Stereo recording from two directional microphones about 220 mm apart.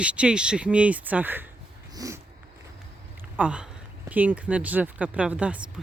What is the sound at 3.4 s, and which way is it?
Speech, 5° right (ahead or behind).